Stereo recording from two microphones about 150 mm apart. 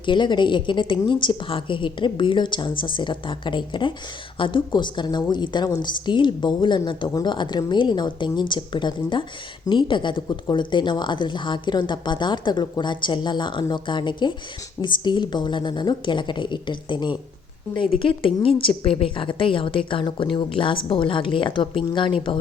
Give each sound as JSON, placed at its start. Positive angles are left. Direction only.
{"t": 0.0, "sound": "a woman's voice", "side_deg": 30}